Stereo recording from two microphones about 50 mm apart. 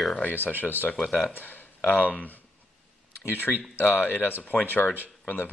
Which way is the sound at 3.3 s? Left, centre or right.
Left.